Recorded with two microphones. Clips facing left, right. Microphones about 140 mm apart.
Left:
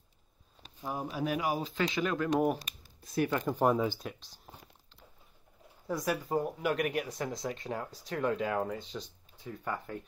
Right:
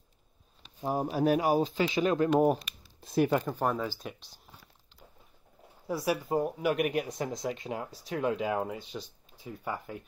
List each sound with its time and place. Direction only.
0.7 s speech: 35° right (ahead or behind)
2.0 s speech: 25° right (ahead or behind)
3.4 s speech: 10° left (ahead or behind)
4.0 s speech: centre (ahead or behind)
5.9 s speech: 10° right (ahead or behind)